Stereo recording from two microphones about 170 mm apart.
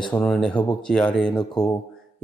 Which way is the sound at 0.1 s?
5° left (ahead or behind).